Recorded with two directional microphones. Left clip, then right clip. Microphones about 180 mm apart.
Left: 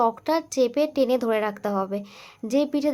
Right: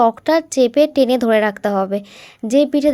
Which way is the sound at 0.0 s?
25° right (ahead or behind).